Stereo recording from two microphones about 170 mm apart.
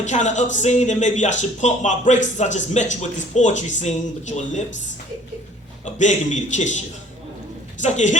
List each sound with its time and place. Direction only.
0.0 s speech: 45° left (ahead or behind)
5.8 s speech: 45° left (ahead or behind)
7.8 s speech: 45° left (ahead or behind)